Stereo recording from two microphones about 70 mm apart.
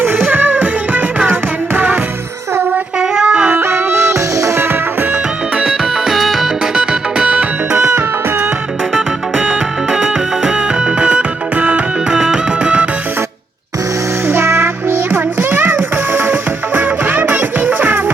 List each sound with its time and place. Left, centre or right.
0.0 s music: right
3.0 s a sound: centre
3.6 s music: right
4.6 s music: right
5.5 s music: centre
9.0 s music: centre
12.1 s music: centre
14.3 s music: right